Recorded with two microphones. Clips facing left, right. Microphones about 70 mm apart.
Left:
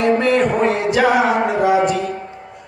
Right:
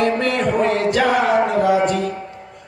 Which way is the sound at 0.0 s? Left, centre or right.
Centre.